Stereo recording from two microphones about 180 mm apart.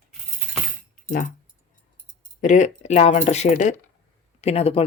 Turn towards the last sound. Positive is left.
turn(degrees=35)  # may be behind; listen again after turning